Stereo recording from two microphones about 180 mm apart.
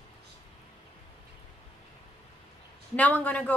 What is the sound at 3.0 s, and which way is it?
Speech, 10° left (ahead or behind).